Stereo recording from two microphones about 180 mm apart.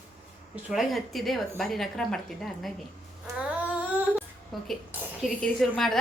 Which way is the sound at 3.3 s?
5° right (ahead or behind).